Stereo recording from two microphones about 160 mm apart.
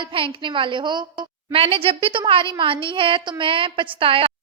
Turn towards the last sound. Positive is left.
turn(degrees=-35)  # may be behind; listen again after turning